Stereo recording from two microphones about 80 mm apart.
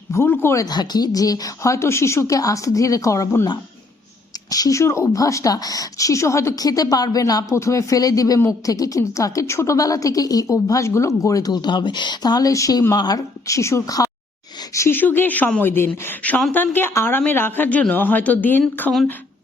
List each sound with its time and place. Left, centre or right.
0.1 s speech: left
0.6 s a woman's voice: left
4.4 s a woman's voice: left
13.0 s a woman's voice: left
13.5 s a woman's voice: left
14.9 s speech: left
18.9 s speech: centre